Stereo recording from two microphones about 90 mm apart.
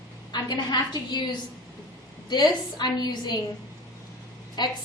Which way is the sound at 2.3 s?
50° left (ahead or behind).